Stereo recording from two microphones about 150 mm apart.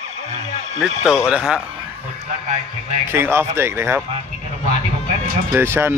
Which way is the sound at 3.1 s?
15° right (ahead or behind).